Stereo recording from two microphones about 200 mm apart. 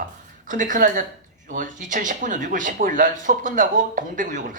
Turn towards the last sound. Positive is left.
turn(degrees=-40)  # may be behind; listen again after turning